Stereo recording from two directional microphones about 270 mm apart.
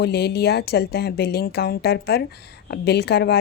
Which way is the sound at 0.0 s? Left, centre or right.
Left.